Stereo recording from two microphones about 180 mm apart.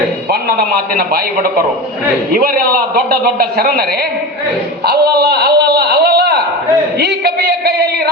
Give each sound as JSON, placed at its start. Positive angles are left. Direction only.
{"t": 0.9, "sound": "a man's voice", "side_deg": -55}
{"t": 5.0, "sound": "a man's voice", "side_deg": -65}